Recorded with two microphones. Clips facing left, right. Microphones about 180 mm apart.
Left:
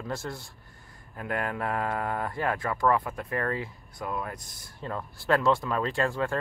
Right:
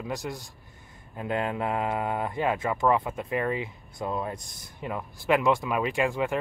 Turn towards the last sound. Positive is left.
turn(degrees=-15)  # may be behind; listen again after turning